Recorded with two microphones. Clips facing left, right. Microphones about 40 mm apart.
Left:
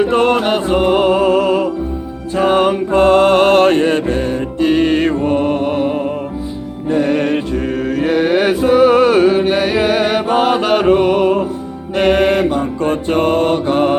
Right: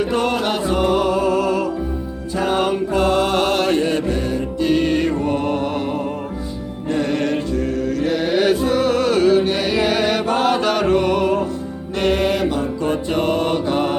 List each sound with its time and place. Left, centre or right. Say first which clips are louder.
0.1 s music: left 6 dB; left
6.9 s mantra: left 5 dB; left